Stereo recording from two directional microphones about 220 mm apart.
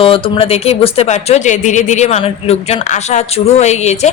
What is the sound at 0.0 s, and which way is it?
Speech, 25° left (ahead or behind).